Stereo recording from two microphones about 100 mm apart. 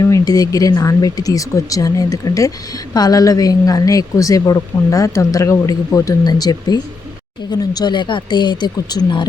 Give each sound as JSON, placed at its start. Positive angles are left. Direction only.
{"t": 0.0, "sound": "a woman's voice", "side_deg": 35}